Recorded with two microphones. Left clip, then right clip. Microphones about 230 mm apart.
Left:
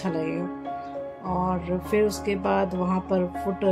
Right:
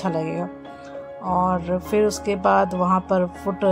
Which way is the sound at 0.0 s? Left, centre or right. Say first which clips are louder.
Right 3 dB; right.